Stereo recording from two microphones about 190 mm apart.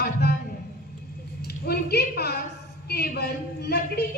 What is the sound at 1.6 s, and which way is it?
A woman's voice, 55° left (ahead or behind).